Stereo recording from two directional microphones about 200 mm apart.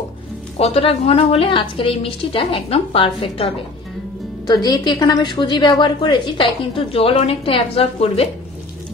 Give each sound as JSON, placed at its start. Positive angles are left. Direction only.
{"t": 0.6, "sound": "a woman's voice", "side_deg": 30}